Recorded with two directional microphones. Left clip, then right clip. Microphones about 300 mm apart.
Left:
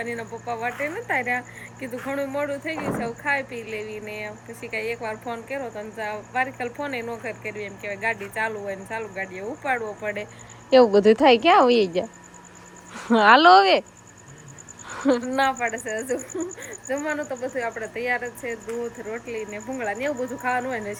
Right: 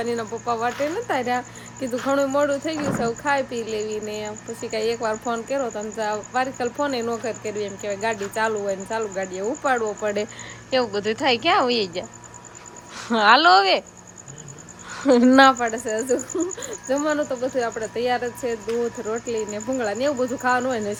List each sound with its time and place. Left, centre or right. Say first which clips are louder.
0.0 s speech: right 5 dB; centre
10.7 s speech: left 7 dB; centre
14.8 s a sound: right 1 dB; centre
15.3 s speech: right 12 dB; right
15.5 s speech: right 3 dB; centre